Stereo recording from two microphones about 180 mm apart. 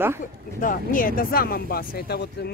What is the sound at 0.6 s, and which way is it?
Speech, 50° left (ahead or behind).